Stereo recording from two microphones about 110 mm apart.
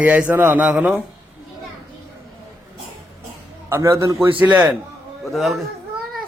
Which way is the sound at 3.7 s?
25° right (ahead or behind).